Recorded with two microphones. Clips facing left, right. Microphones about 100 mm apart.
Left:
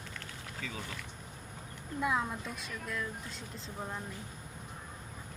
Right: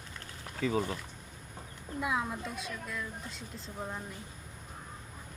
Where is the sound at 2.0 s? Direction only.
5° right (ahead or behind).